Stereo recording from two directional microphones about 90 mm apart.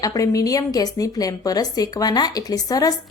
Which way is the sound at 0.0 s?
40° left (ahead or behind).